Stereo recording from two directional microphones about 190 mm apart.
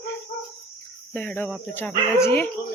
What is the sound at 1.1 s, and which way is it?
Speech, 10° left (ahead or behind).